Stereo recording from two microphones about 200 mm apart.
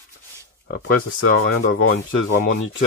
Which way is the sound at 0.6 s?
70° left (ahead or behind).